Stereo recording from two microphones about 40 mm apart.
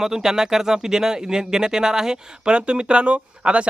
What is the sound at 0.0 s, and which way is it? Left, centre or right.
Speech, centre.